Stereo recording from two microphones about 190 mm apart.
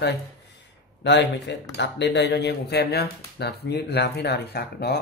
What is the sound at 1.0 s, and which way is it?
Speech, 65° left (ahead or behind).